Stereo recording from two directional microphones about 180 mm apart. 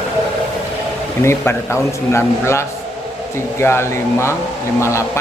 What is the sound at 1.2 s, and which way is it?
A man's voice, 15° left (ahead or behind).